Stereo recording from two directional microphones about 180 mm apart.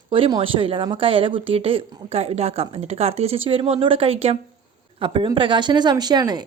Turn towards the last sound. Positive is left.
turn(degrees=-25)  # may be behind; listen again after turning